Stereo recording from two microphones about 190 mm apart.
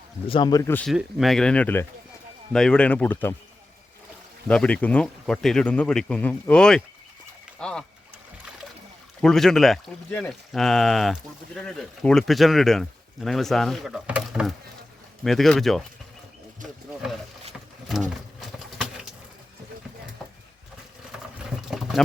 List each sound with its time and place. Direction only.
0.3 s speech: 25° left (ahead or behind)
0.9 s speech: centre (ahead or behind)
4.4 s speech: 5° left (ahead or behind)
9.2 s speech: centre (ahead or behind)
18.3 s patter: centre (ahead or behind)